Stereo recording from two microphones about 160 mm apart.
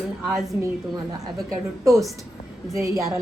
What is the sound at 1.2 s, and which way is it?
A woman's voice, 20° right (ahead or behind).